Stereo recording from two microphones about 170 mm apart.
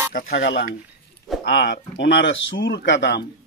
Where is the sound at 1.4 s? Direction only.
90° left.